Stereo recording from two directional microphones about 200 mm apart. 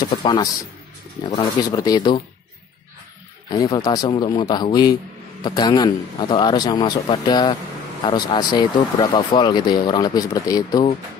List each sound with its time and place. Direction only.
0.0 s speech: 25° left (ahead or behind)
3.4 s speech: 20° left (ahead or behind)